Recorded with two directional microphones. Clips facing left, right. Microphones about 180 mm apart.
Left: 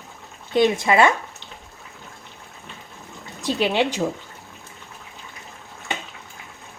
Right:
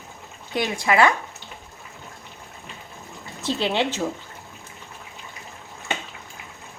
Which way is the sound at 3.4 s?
15° left (ahead or behind).